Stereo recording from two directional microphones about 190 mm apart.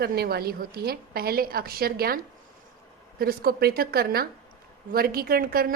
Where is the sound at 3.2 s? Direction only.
55° right (ahead or behind).